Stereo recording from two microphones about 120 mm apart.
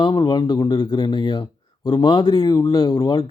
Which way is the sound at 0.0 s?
35° left (ahead or behind).